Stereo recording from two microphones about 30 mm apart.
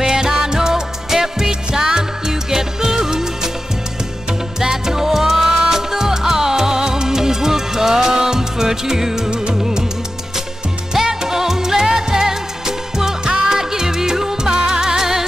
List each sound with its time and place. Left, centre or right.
0.0 s music: centre
11.1 s music: centre